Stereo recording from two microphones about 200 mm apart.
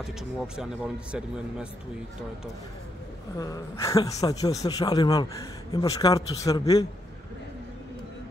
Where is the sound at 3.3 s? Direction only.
15° left (ahead or behind).